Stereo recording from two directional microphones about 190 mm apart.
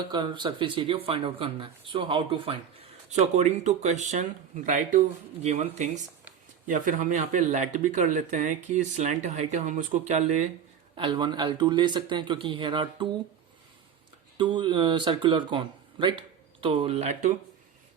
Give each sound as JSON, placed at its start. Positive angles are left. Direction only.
{"t": 0.0, "sound": "speech", "side_deg": -25}
{"t": 3.1, "sound": "speech", "side_deg": -40}
{"t": 10.9, "sound": "speech", "side_deg": -25}
{"t": 14.3, "sound": "speech", "side_deg": -25}